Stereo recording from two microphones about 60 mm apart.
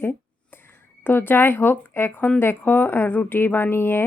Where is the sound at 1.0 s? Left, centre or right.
Left.